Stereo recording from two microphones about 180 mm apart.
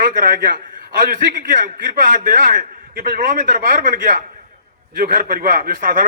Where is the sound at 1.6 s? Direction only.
50° right (ahead or behind).